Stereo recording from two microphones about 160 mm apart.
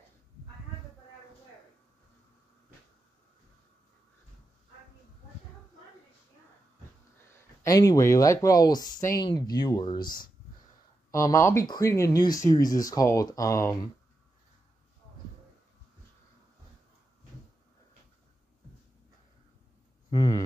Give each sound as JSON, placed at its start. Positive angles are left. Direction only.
{"t": 7.2, "sound": "speech", "side_deg": 15}
{"t": 20.1, "sound": "speech", "side_deg": 25}